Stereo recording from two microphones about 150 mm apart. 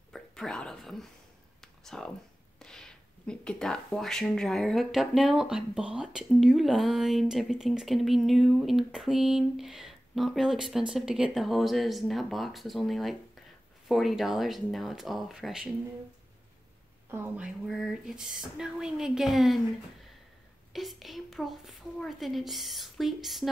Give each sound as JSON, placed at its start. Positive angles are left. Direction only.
{"t": 0.1, "sound": "speech", "side_deg": 5}
{"t": 1.6, "sound": "a sound", "side_deg": 5}
{"t": 2.6, "sound": "speech", "side_deg": 5}
{"t": 17.1, "sound": "speech", "side_deg": -5}
{"t": 20.7, "sound": "speech", "side_deg": 0}